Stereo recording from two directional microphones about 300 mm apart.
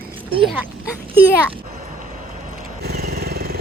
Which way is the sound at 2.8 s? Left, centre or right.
Right.